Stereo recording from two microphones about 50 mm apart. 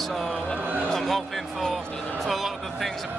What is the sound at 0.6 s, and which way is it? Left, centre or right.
Speech, right.